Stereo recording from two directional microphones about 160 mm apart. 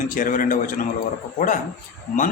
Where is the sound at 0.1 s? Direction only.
60° left (ahead or behind).